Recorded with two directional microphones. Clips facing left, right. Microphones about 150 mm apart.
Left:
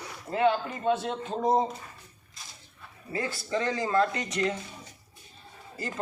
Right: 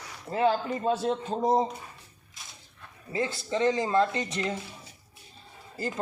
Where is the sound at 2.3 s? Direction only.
Centre (ahead or behind).